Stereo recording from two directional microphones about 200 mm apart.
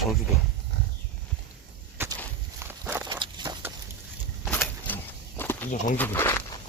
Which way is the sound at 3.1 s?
25° right (ahead or behind).